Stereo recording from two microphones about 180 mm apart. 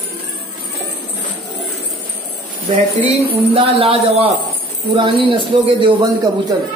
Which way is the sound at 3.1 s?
30° right (ahead or behind).